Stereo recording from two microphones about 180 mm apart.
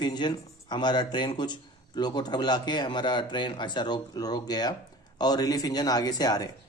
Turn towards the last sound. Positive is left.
turn(degrees=20)  # may be behind; listen again after turning